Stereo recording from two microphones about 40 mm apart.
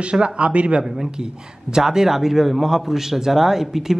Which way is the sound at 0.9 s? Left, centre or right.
Centre.